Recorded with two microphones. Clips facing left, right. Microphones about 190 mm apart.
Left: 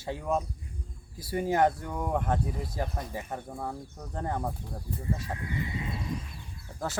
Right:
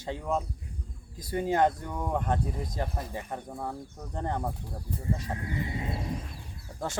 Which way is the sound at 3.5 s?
5° right (ahead or behind).